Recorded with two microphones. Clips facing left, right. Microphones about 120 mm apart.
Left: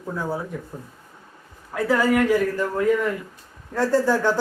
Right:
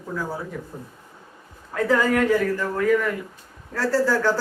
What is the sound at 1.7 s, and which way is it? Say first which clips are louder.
A man's voice: even; 10° left (ahead or behind).